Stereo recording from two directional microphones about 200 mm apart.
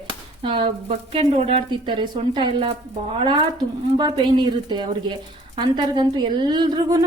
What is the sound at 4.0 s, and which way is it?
A woman's voice, 20° right (ahead or behind).